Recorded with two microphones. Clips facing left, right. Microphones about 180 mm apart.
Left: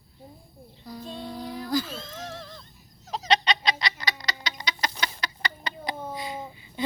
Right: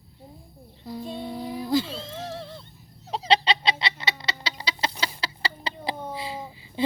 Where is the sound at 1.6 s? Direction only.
25° right (ahead or behind).